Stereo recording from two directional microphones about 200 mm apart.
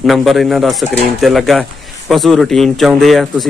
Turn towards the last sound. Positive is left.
turn(degrees=0)  # may be behind; listen again after turning